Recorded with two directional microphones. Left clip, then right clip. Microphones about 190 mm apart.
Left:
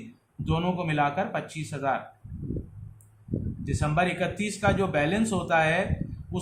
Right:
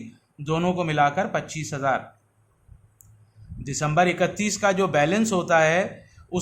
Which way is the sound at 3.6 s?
40° right (ahead or behind).